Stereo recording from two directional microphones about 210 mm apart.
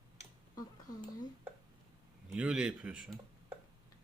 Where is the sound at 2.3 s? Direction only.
5° right (ahead or behind).